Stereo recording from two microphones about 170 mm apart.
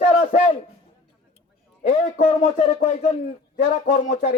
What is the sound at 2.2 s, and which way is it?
A man's voice, 40° left (ahead or behind).